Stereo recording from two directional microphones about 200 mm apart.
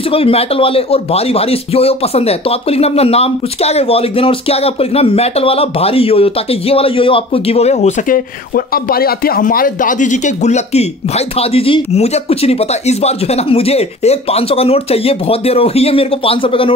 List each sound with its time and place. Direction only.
0.1 s speech: 30° left (ahead or behind)